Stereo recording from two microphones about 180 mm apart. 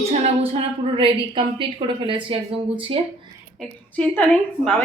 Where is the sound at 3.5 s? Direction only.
5° left (ahead or behind).